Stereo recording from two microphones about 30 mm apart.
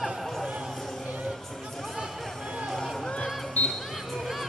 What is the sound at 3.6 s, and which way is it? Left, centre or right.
Music, left.